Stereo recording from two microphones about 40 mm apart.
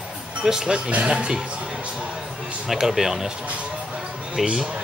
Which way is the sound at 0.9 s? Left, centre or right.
Right.